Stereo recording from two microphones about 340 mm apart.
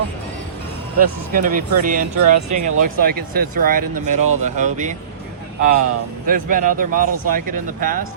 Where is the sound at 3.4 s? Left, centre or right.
Right.